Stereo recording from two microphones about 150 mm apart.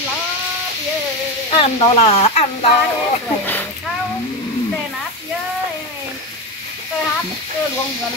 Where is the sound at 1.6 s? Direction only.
40° left (ahead or behind).